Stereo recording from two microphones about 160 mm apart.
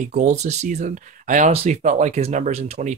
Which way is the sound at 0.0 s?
50° right (ahead or behind).